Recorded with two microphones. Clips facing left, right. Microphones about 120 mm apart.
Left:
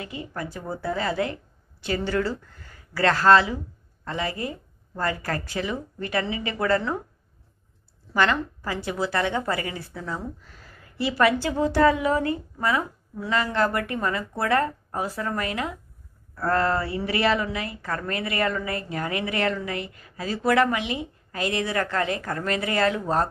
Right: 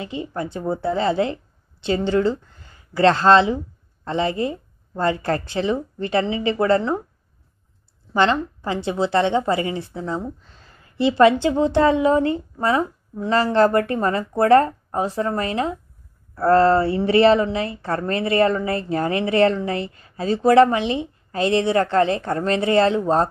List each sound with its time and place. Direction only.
0.0 s a woman's voice: 25° right (ahead or behind)
8.1 s a woman's voice: 25° right (ahead or behind)